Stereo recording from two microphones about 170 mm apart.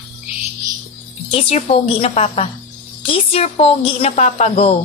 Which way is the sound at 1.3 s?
35° left (ahead or behind).